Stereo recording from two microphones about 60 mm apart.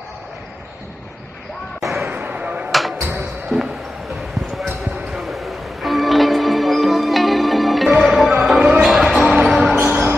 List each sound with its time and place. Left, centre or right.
1.8 s basketball bounce: centre
2.0 s basketball bounce: right
2.4 s music: right
3.0 s music: right
3.5 s a sound: centre
5.1 s music: centre
8.5 s music: centre
8.8 s music: centre
9.8 s basketball bounce: right